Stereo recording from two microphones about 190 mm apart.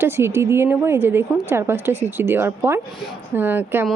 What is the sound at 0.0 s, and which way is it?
A woman's voice, 15° right (ahead or behind).